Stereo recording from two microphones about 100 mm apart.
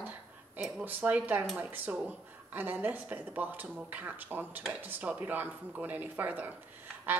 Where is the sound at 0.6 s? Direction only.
10° right (ahead or behind).